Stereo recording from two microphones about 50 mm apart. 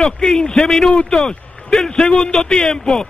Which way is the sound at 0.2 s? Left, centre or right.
Centre.